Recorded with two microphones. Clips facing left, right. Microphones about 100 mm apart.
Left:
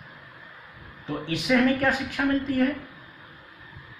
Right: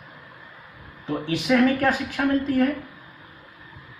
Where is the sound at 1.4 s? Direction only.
Centre (ahead or behind).